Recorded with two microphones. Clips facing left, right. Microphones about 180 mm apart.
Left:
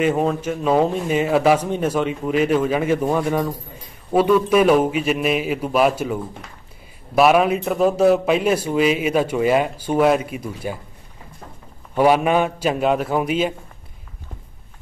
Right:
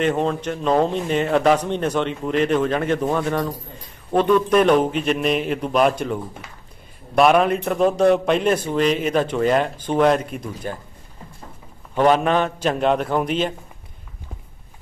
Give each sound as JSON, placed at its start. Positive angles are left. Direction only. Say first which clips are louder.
{"t": 0.0, "sound": "a man's voice", "louder": "left 1 dB", "side_deg": 5}
{"t": 12.0, "sound": "a man's voice", "louder": "left 1 dB", "side_deg": 10}